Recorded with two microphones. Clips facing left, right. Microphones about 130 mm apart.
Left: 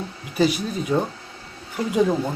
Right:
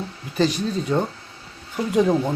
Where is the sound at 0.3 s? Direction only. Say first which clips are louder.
Even; 10° left (ahead or behind).